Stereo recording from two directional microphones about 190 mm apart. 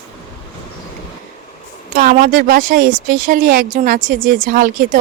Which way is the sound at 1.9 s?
40° right (ahead or behind).